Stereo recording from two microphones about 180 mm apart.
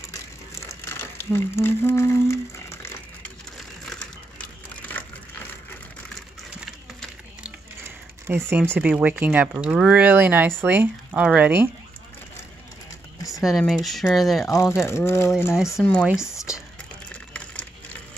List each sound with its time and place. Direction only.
0.1 s a sound: 15° left (ahead or behind)
3.5 s crushing: 5° left (ahead or behind)
6.6 s a sound: centre (ahead or behind)
8.3 s speech: 15° right (ahead or behind)
13.4 s speech: centre (ahead or behind)
14.4 s speech: 15° left (ahead or behind)